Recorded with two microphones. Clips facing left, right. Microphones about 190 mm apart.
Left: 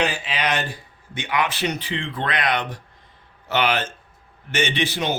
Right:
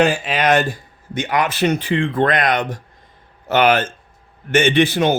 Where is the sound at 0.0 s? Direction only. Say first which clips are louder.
Right 7 dB; 50° right (ahead or behind).